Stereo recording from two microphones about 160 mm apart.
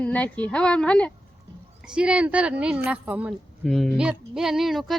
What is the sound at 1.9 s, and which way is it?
Speech, 5° right (ahead or behind).